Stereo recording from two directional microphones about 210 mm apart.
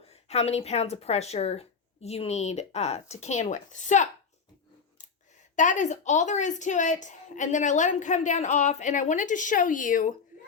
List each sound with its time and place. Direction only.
0.0 s a woman's voice: 30° left (ahead or behind)
5.5 s a woman's voice: 35° left (ahead or behind)